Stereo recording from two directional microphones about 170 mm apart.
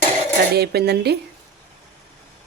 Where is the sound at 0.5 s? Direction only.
70° right (ahead or behind).